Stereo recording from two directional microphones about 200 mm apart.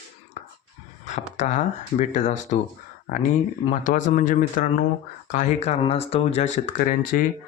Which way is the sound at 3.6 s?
40° left (ahead or behind).